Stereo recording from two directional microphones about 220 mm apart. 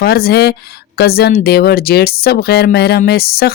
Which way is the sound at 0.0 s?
45° left (ahead or behind).